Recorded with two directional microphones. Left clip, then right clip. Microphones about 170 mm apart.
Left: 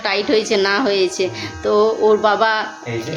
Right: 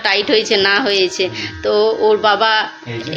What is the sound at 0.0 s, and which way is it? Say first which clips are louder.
A woman's voice: right 3 dB; 20° left (ahead or behind).